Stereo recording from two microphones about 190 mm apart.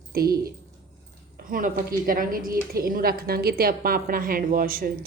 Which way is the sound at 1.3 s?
45° right (ahead or behind).